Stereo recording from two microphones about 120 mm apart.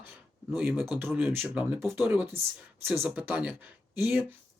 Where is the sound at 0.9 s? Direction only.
20° right (ahead or behind).